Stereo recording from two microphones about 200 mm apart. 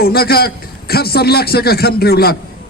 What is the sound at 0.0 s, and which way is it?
A man's voice, 50° left (ahead or behind).